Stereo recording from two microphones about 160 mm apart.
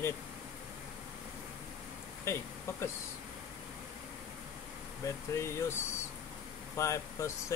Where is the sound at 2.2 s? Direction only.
15° left (ahead or behind).